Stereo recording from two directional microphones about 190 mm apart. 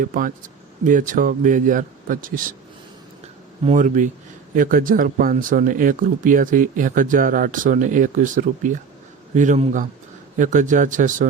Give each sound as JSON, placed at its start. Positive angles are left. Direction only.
{"t": 0.0, "sound": "speech", "side_deg": -45}
{"t": 3.6, "sound": "speech", "side_deg": -40}